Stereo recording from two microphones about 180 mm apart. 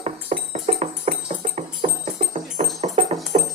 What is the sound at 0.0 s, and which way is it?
Music, 35° right (ahead or behind).